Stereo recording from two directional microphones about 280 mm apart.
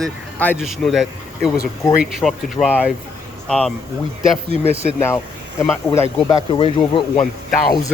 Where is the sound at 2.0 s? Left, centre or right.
Centre.